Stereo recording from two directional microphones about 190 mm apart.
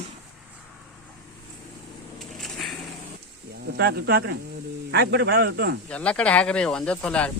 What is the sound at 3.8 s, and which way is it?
Speech, 55° right (ahead or behind).